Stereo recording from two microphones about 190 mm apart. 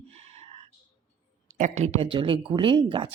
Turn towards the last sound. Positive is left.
turn(degrees=-25)  # may be behind; listen again after turning